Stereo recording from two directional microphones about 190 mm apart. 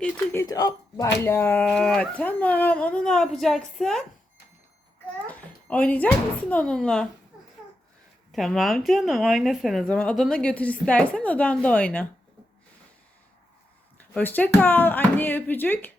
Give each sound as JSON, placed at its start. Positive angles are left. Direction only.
{"t": 0.0, "sound": "speech", "side_deg": 15}
{"t": 5.2, "sound": "speech", "side_deg": 5}
{"t": 8.3, "sound": "speech", "side_deg": 0}
{"t": 14.0, "sound": "speech", "side_deg": 10}